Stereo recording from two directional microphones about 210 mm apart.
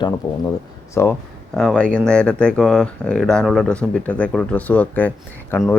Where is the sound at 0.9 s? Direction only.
10° left (ahead or behind).